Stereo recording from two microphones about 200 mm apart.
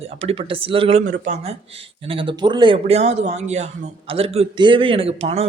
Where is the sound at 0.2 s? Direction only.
30° right (ahead or behind).